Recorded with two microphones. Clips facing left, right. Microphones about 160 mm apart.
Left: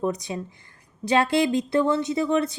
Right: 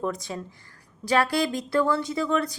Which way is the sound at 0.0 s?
20° left (ahead or behind).